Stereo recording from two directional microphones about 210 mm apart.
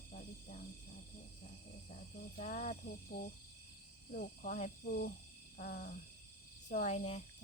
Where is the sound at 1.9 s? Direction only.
40° left (ahead or behind).